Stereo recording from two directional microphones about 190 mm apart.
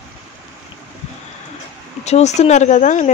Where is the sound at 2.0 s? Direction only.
35° left (ahead or behind).